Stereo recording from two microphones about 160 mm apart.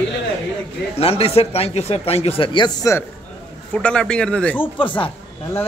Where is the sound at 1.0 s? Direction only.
40° left (ahead or behind).